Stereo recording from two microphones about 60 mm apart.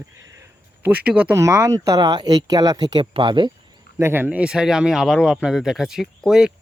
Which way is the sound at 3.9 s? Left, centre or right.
Right.